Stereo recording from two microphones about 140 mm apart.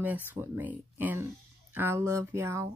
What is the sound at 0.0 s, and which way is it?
Speech, 10° right (ahead or behind).